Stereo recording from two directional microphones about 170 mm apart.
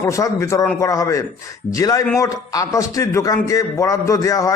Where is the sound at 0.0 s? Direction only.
15° left (ahead or behind).